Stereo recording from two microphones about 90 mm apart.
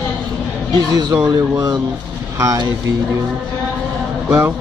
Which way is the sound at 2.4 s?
35° right (ahead or behind).